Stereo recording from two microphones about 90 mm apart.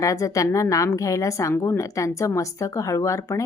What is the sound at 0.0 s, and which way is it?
A woman's voice, 35° left (ahead or behind).